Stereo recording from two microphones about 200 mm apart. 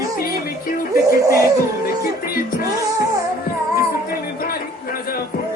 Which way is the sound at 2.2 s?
45° left (ahead or behind).